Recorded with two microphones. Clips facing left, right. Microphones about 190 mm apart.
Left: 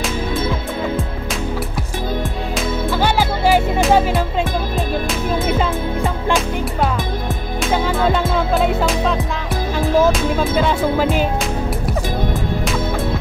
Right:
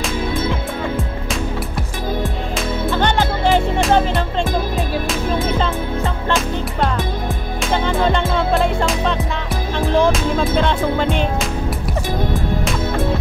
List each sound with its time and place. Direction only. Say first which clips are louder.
3.0 s music: left 1 dB; 10° left (ahead or behind)
7.6 s music: even; 5° left (ahead or behind)